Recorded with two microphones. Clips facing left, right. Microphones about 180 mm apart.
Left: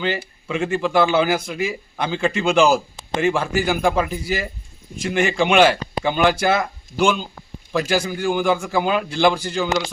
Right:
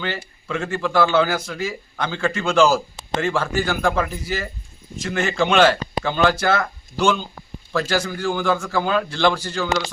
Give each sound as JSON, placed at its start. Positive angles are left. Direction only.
{"t": 0.0, "sound": "speech", "side_deg": 15}